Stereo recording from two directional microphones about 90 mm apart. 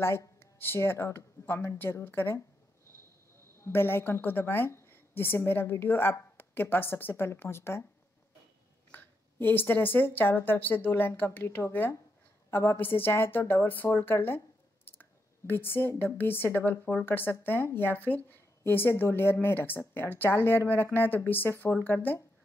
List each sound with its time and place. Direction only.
0.0 s speech: 30° left (ahead or behind)
3.6 s speech: 25° left (ahead or behind)
8.9 s speech: 25° left (ahead or behind)